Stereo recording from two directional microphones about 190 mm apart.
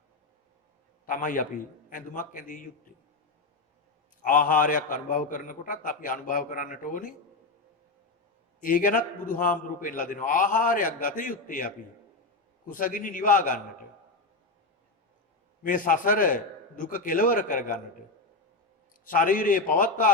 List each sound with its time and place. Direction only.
1.0 s a man's voice: 45° left (ahead or behind)
4.2 s a man's voice: 45° left (ahead or behind)
8.6 s a man's voice: 45° left (ahead or behind)
15.6 s a man's voice: 45° left (ahead or behind)
19.0 s a man's voice: 45° left (ahead or behind)